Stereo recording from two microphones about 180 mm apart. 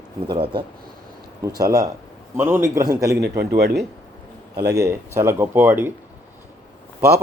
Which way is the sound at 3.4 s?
65° right (ahead or behind).